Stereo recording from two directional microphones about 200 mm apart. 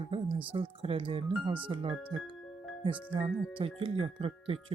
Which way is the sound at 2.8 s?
25° right (ahead or behind).